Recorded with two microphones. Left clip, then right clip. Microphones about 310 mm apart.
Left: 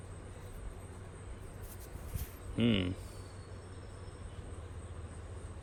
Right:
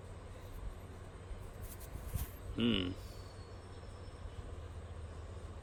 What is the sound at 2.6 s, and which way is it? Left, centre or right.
Speech, centre.